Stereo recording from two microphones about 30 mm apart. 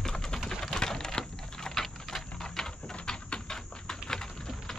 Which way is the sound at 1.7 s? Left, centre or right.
Centre.